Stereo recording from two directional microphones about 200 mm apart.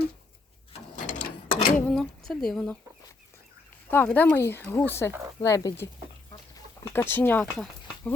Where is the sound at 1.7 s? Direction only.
Centre (ahead or behind).